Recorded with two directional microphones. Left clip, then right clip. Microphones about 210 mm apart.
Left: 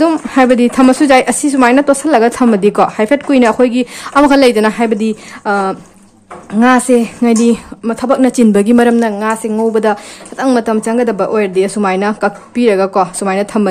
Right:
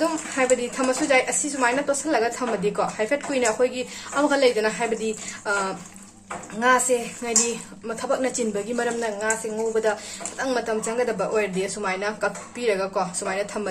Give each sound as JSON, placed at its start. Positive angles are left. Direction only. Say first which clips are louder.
{"t": 0.0, "sound": "a woman's voice", "louder": "left 13 dB", "side_deg": 50}